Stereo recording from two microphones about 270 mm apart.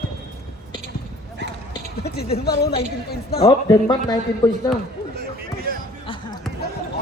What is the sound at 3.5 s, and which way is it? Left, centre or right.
Speech, centre.